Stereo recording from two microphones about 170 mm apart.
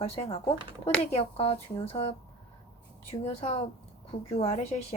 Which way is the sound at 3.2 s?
40° left (ahead or behind).